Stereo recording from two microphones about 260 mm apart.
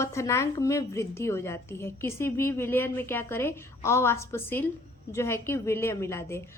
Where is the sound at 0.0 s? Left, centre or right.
Centre.